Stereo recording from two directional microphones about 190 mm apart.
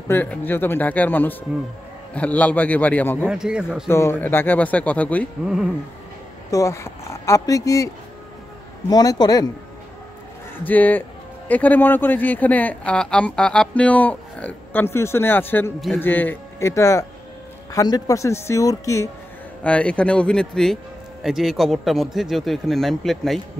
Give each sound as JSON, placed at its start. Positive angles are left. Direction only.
{"t": 0.1, "sound": "a man's voice", "side_deg": 10}
{"t": 3.3, "sound": "speech", "side_deg": -5}
{"t": 3.9, "sound": "a man's voice", "side_deg": 15}
{"t": 6.5, "sound": "a man's voice", "side_deg": 15}
{"t": 10.7, "sound": "a man's voice", "side_deg": 10}